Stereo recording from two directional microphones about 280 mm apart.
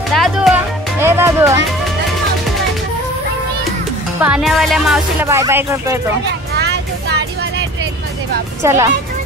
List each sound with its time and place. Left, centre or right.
0.1 s music: centre
1.0 s speech: centre
4.2 s speech: centre
6.7 s vehicle: right
8.6 s speech: centre